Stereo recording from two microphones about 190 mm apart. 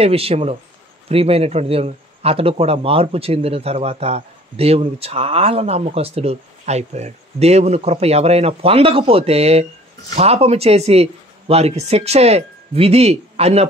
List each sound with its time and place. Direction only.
0.0 s speech: 30° right (ahead or behind)